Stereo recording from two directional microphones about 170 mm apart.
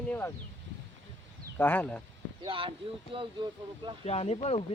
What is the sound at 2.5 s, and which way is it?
Speech, 30° right (ahead or behind).